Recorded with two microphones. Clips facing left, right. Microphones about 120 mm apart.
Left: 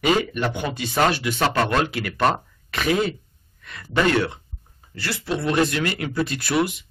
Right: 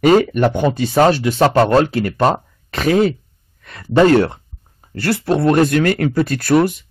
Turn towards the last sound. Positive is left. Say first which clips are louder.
# right 8 dB
turn(degrees=-45)  # may be behind; listen again after turning